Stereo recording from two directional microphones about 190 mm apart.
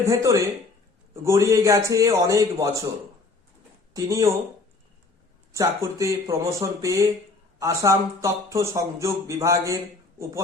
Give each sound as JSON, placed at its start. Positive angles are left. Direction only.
{"t": 0.0, "sound": "speech", "side_deg": -15}
{"t": 3.9, "sound": "speech", "side_deg": -15}
{"t": 5.5, "sound": "speech", "side_deg": -15}